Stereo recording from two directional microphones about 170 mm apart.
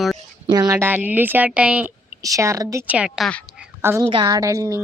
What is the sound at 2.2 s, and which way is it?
Speech, 20° right (ahead or behind).